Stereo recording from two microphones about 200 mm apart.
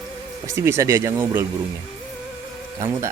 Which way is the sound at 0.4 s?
15° right (ahead or behind).